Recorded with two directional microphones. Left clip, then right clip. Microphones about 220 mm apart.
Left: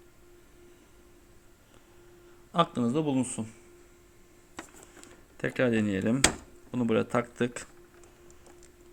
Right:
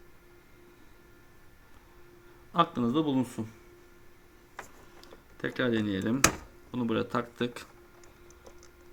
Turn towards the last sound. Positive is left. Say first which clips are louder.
# left 3 dB
turn(degrees=30)  # may be behind; listen again after turning